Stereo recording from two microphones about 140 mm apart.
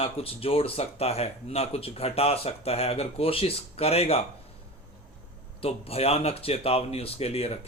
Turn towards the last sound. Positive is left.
turn(degrees=45)  # may be behind; listen again after turning